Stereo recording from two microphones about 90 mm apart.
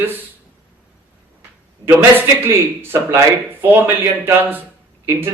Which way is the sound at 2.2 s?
25° right (ahead or behind).